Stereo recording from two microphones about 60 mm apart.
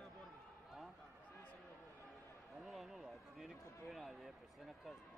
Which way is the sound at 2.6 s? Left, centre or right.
Centre.